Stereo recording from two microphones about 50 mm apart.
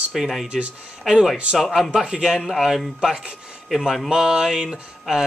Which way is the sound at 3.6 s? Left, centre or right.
Centre.